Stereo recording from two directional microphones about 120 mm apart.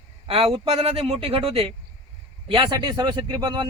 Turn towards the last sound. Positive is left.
turn(degrees=-40)  # may be behind; listen again after turning